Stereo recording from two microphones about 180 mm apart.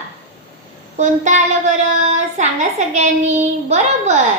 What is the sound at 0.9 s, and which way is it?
A child's voice, 40° right (ahead or behind).